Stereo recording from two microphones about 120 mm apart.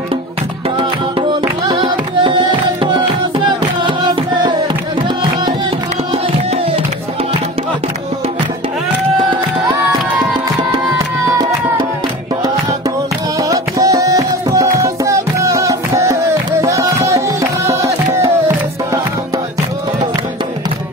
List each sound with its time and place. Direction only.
2.8 s music: 45° right (ahead or behind)
13.4 s music: 30° right (ahead or behind)